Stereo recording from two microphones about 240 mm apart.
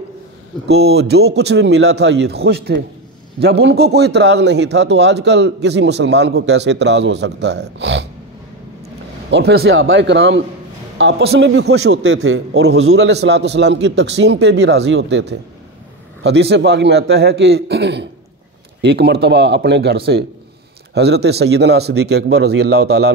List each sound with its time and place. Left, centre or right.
0.7 s a man's voice: right
9.3 s a man's voice: right